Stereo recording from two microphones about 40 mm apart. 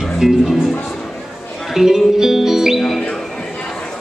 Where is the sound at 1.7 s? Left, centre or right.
Centre.